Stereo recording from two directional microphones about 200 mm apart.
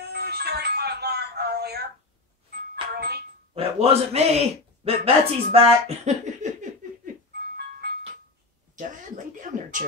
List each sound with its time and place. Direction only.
0.0 s a sound: 55° right (ahead or behind)
2.7 s music: 50° right (ahead or behind)
3.5 s a man's voice: 30° right (ahead or behind)
7.8 s music: 55° right (ahead or behind)